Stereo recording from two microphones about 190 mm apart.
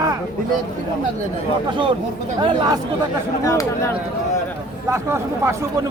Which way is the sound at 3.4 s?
15° left (ahead or behind).